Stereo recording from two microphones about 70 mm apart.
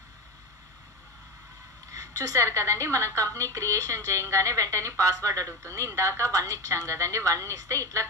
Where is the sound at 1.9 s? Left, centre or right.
Right.